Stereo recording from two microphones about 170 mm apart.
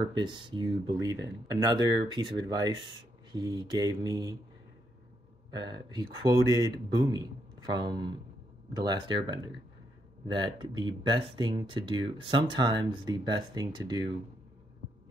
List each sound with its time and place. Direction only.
0.0 s speech: 30° right (ahead or behind)
5.5 s speech: 25° right (ahead or behind)